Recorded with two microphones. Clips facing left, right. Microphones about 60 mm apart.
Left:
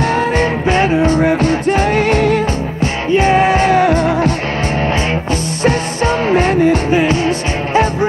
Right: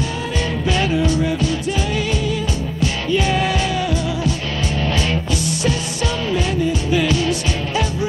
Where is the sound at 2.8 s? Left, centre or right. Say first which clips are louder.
Left 6 dB; left.